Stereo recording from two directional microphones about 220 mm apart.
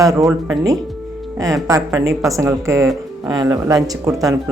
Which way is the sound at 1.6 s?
15° right (ahead or behind).